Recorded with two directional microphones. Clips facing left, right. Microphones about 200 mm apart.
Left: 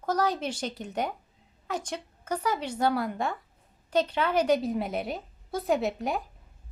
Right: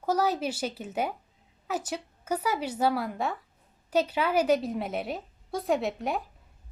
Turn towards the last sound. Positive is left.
turn(degrees=0)  # may be behind; listen again after turning